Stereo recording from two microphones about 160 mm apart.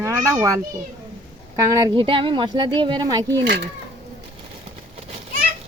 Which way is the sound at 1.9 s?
35° right (ahead or behind).